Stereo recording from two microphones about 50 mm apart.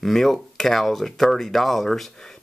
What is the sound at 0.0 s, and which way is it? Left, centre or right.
Speech, centre.